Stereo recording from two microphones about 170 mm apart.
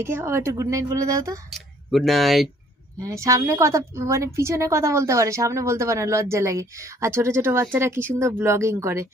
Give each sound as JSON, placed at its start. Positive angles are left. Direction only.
{"t": 0.0, "sound": "speech", "side_deg": -15}
{"t": 1.5, "sound": "speech", "side_deg": 0}
{"t": 3.0, "sound": "speech", "side_deg": -20}